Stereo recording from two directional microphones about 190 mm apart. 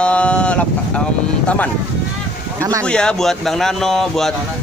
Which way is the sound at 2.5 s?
15° right (ahead or behind).